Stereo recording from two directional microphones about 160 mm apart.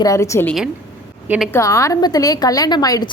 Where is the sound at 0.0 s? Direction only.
20° left (ahead or behind).